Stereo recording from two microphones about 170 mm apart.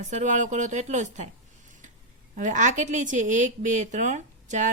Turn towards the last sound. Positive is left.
turn(degrees=-45)  # may be behind; listen again after turning